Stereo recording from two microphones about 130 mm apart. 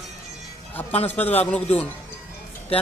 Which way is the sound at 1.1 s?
15° left (ahead or behind).